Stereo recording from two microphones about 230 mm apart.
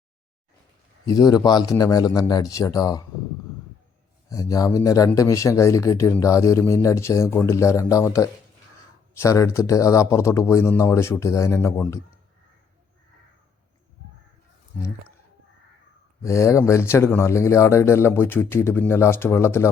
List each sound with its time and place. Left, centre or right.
1.0 s speech: centre
4.3 s speech: centre
16.2 s speech: centre